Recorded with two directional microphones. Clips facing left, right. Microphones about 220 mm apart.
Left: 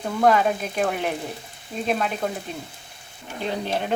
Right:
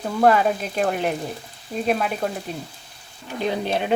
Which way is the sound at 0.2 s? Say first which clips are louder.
Right 2 dB; 5° right (ahead or behind).